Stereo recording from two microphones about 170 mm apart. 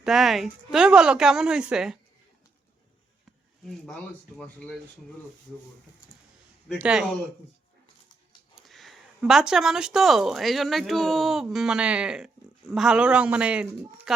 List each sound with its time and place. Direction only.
0.0 s speech: centre (ahead or behind)
6.7 s speech: 5° right (ahead or behind)
8.5 s a man's voice: centre (ahead or behind)